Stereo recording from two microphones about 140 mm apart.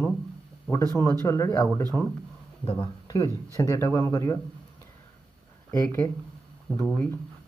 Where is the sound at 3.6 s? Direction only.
20° left (ahead or behind).